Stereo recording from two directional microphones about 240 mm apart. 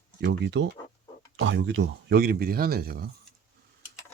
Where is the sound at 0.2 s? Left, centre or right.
Right.